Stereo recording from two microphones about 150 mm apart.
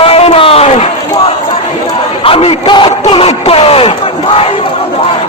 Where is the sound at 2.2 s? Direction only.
40° left (ahead or behind).